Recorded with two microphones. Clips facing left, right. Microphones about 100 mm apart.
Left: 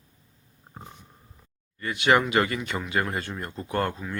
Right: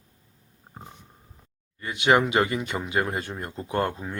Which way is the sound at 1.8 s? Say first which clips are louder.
Right 1 dB; 20° right (ahead or behind).